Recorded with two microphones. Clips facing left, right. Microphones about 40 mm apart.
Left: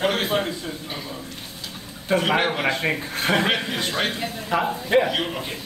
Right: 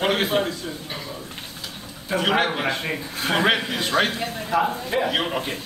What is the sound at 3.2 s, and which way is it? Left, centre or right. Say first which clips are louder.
Speech: left 1 dB; left.